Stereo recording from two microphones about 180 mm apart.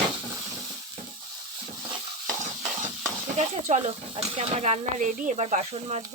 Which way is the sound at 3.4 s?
40° right (ahead or behind).